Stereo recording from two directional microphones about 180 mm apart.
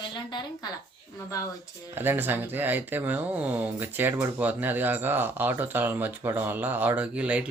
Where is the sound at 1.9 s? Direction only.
10° right (ahead or behind).